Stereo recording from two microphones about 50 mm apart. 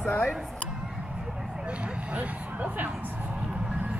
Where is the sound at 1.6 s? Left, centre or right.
Right.